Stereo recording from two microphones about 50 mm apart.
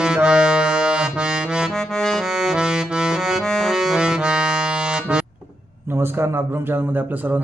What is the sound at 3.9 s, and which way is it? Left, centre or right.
Accordion, centre.